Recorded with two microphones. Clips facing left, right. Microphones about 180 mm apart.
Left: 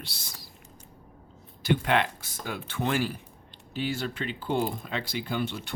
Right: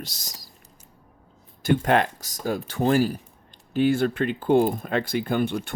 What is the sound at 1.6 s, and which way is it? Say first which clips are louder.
Speech: right 5 dB; 45° right (ahead or behind).